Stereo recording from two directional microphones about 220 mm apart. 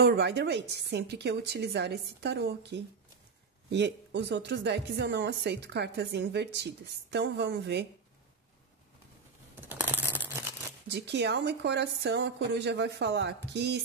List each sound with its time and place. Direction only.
0.0 s a woman's voice: 50° right (ahead or behind)
9.7 s a sound: 10° right (ahead or behind)
10.9 s a woman's voice: 50° right (ahead or behind)